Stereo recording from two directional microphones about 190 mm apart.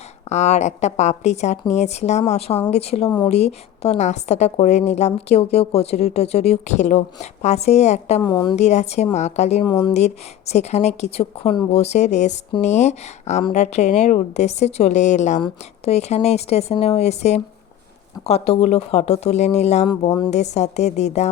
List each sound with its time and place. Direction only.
0.3 s a woman's voice: 35° left (ahead or behind)
8.2 s a woman's voice: 20° left (ahead or behind)
8.5 s a woman's voice: 35° left (ahead or behind)
9.6 s a woman's voice: 25° left (ahead or behind)
9.9 s a woman's voice: 35° left (ahead or behind)
20.1 s a woman's voice: 20° left (ahead or behind)
20.3 s a woman's voice: 35° left (ahead or behind)